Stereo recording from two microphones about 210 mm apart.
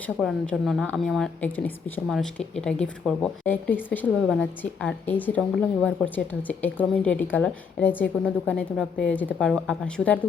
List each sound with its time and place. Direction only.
0.2 s a woman's voice: centre (ahead or behind)